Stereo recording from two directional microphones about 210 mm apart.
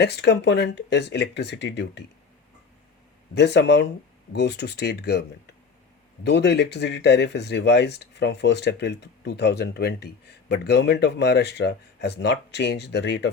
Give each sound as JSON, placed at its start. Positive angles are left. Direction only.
{"t": 0.0, "sound": "speech", "side_deg": 55}
{"t": 3.3, "sound": "speech", "side_deg": 55}
{"t": 6.2, "sound": "speech", "side_deg": 55}